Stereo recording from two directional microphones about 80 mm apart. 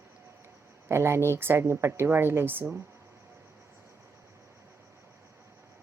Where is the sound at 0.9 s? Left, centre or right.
Right.